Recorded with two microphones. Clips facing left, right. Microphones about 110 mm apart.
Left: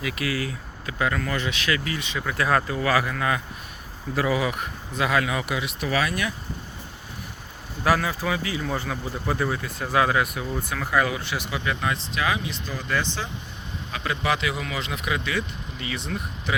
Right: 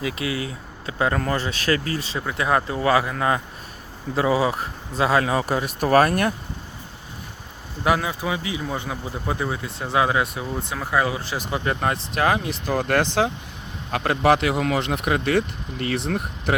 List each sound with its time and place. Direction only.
0.0 s speech: 25° right (ahead or behind)
2.2 s speech: 20° right (ahead or behind); by 6.3 s 50° right (ahead or behind)
7.9 s speech: 20° right (ahead or behind); by 13.3 s 70° right (ahead or behind)
13.9 s speech: 55° right (ahead or behind)